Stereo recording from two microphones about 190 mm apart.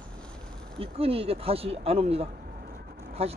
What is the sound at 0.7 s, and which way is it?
Speech, 30° right (ahead or behind).